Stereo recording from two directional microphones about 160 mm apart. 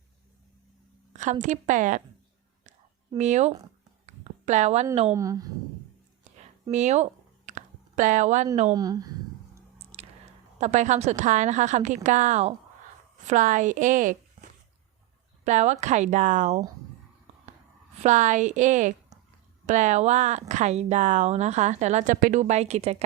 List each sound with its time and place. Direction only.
1.1 s a woman's voice: 50° right (ahead or behind)
3.2 s a woman's voice: 45° right (ahead or behind)
4.0 s a sound: 45° right (ahead or behind)
5.1 s a woman's voice: 20° right (ahead or behind)
6.7 s a sound: 45° right (ahead or behind)
8.7 s a woman's voice: 25° right (ahead or behind)
9.7 s squish: 40° right (ahead or behind)
10.6 s a woman's voice: 50° right (ahead or behind)
15.4 s a woman's voice: 45° right (ahead or behind)
18.0 s a woman's voice: 50° right (ahead or behind)